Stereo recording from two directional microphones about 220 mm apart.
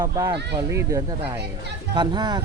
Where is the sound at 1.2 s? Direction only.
50° right (ahead or behind).